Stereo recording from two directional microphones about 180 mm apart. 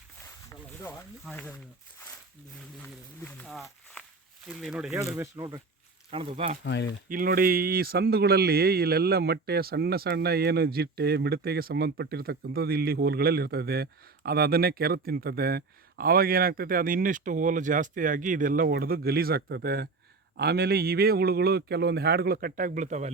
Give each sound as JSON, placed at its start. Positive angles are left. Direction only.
{"t": 1.2, "sound": "speech", "side_deg": 5}
{"t": 2.6, "sound": "speech", "side_deg": 10}
{"t": 3.4, "sound": "a sound", "side_deg": 0}
{"t": 4.4, "sound": "speech", "side_deg": 0}
{"t": 5.1, "sound": "speech", "side_deg": -20}
{"t": 6.1, "sound": "speech", "side_deg": -30}
{"t": 6.7, "sound": "speech", "side_deg": 75}
{"t": 7.1, "sound": "a man's voice", "side_deg": -50}